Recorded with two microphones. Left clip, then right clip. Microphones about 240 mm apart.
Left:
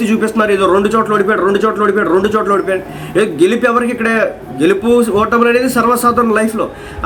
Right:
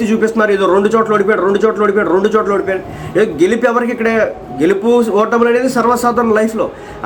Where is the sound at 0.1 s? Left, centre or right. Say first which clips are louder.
Right 1 dB; centre.